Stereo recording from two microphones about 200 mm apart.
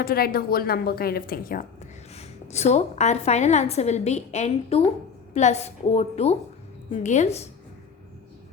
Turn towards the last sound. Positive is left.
turn(degrees=35)  # may be behind; listen again after turning